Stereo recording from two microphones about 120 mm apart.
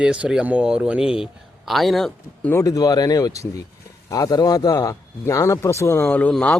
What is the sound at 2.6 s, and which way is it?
A man's voice, 30° left (ahead or behind).